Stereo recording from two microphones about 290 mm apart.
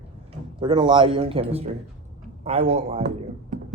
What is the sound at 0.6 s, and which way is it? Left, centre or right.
A man's voice, centre.